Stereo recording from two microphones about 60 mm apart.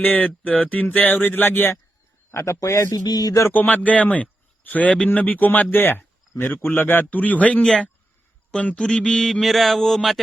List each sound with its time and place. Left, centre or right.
0.0 s speech: left
2.3 s a man's voice: left
3.5 s speech: left
8.5 s mantra: centre